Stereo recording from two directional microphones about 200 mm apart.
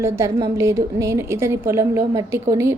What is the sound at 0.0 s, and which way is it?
A woman's voice, 15° right (ahead or behind).